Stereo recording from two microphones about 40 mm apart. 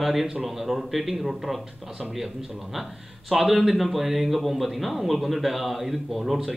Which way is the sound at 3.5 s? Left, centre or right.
Centre.